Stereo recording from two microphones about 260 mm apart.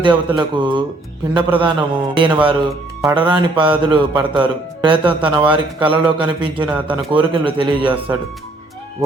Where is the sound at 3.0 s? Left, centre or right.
Centre.